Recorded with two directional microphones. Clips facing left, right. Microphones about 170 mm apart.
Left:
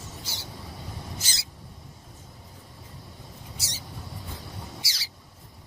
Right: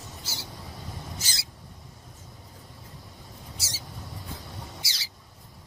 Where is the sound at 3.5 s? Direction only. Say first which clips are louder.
Left 1 dB; centre (ahead or behind).